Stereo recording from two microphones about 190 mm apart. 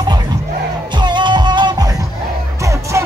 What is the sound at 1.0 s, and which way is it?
Music, 25° right (ahead or behind).